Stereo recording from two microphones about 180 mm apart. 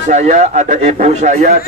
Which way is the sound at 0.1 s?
40° right (ahead or behind).